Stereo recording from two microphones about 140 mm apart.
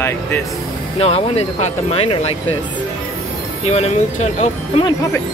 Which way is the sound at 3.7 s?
50° left (ahead or behind).